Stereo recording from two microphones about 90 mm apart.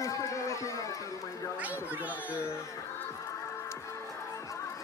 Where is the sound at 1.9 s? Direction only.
20° right (ahead or behind).